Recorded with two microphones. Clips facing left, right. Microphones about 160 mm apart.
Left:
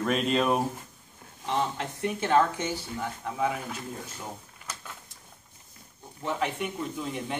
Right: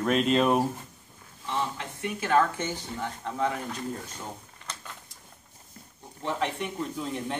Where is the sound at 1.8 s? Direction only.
30° left (ahead or behind).